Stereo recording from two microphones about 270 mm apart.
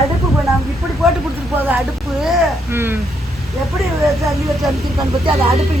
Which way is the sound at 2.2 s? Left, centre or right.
Centre.